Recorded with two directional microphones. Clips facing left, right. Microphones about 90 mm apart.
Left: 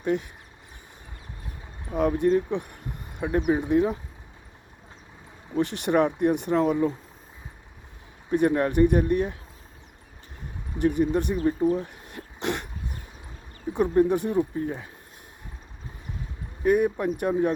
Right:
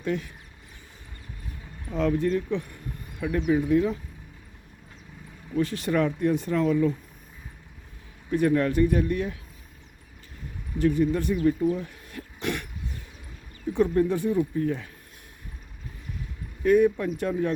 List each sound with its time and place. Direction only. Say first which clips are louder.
0.0 s speech: left 3 dB; 20° left (ahead or behind)
1.8 s speech: left 2 dB; 20° left (ahead or behind)
5.5 s speech: left 1 dB; 25° left (ahead or behind)
8.3 s speech: left 1 dB; 25° left (ahead or behind)
10.9 s speech: even; 20° left (ahead or behind)
11.3 s speech: even; 35° left (ahead or behind)
13.7 s speech: left 2 dB; 20° left (ahead or behind)
16.6 s speech: right 2 dB; 15° left (ahead or behind)